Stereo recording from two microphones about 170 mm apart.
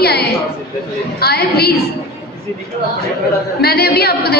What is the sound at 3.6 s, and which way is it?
Speech, 70° left (ahead or behind).